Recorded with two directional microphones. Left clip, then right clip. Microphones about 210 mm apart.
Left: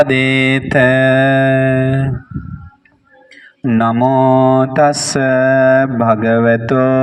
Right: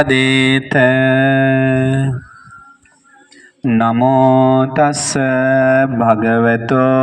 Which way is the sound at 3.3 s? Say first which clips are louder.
Even; 25° left (ahead or behind).